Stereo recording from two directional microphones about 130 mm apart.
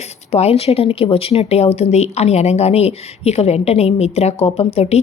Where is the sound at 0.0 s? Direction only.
55° left (ahead or behind).